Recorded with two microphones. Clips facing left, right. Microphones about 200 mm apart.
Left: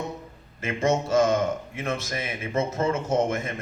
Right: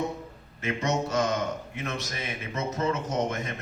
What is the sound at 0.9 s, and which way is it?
Speech, 25° left (ahead or behind).